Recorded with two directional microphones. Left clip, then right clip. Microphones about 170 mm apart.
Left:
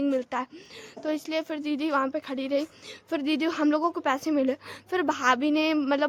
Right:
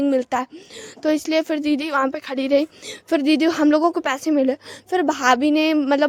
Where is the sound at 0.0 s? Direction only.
40° right (ahead or behind).